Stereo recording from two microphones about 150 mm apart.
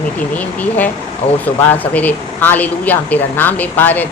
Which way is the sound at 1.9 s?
10° left (ahead or behind).